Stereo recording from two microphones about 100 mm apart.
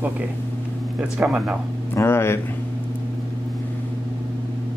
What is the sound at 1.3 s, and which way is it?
Speech, 10° right (ahead or behind).